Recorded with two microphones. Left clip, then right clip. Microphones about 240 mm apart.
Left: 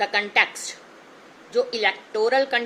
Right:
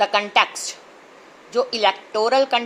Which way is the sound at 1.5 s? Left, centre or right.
Centre.